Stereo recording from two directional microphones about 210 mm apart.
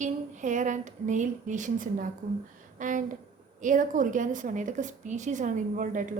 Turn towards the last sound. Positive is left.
turn(degrees=-40)  # may be behind; listen again after turning